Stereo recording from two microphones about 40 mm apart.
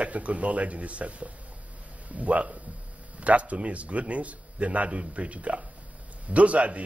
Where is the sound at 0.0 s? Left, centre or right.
Right.